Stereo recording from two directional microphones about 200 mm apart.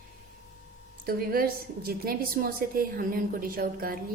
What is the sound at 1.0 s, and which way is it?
A woman's voice, 50° right (ahead or behind).